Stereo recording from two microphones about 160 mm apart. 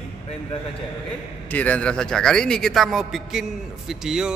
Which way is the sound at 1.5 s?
10° left (ahead or behind).